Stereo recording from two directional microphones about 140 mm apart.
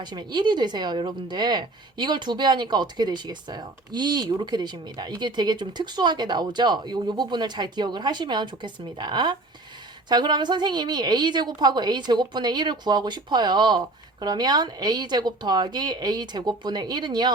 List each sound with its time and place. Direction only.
0.0 s speech: 30° right (ahead or behind)